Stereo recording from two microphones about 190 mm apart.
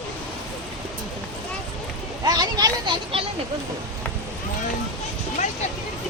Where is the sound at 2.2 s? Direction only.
20° right (ahead or behind).